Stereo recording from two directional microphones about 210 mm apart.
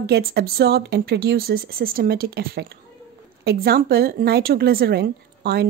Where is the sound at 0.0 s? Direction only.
50° right (ahead or behind).